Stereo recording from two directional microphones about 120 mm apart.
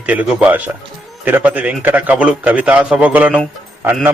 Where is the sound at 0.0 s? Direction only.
10° right (ahead or behind).